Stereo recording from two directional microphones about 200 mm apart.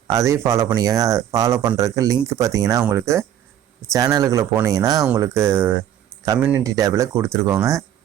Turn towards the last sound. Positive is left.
turn(degrees=-15)  # may be behind; listen again after turning